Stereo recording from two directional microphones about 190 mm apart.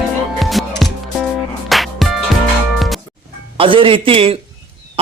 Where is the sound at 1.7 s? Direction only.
Centre (ahead or behind).